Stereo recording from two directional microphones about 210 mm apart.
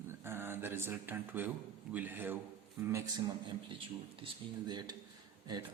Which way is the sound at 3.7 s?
25° right (ahead or behind).